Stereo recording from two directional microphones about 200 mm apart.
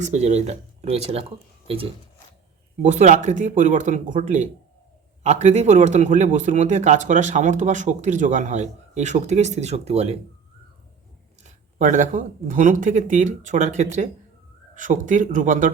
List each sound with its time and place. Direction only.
0.0 s a man's voice: 35° right (ahead or behind)
11.4 s a man's voice: 40° right (ahead or behind)